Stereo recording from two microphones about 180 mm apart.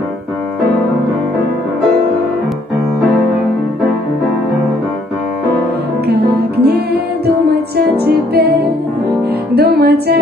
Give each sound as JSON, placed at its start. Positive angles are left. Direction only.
{"t": 6.0, "sound": "music", "side_deg": -60}
{"t": 9.6, "sound": "music", "side_deg": -60}